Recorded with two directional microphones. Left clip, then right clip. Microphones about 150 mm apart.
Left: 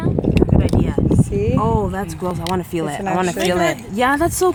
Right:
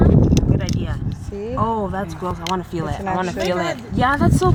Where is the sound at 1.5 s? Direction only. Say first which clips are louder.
Right 2 dB; 40° left (ahead or behind).